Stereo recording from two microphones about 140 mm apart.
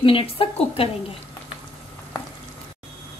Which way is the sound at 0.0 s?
40° left (ahead or behind).